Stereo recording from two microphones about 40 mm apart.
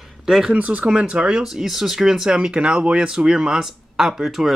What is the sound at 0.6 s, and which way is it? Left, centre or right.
Speech, right.